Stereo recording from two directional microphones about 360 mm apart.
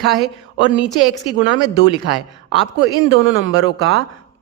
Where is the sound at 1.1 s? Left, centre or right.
Centre.